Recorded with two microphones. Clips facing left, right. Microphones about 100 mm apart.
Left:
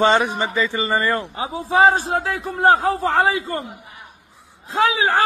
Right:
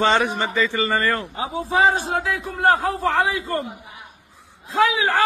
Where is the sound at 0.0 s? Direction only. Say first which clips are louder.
Left 2 dB; 20° left (ahead or behind).